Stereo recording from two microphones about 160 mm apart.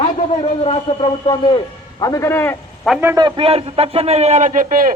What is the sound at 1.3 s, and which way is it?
A man's voice, 30° left (ahead or behind).